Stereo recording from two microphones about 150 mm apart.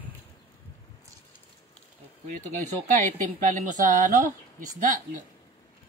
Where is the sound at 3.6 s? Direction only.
60° right (ahead or behind).